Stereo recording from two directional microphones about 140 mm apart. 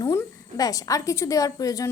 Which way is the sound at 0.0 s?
25° left (ahead or behind).